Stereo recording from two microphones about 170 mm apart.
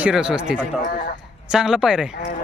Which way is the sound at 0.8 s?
65° left (ahead or behind).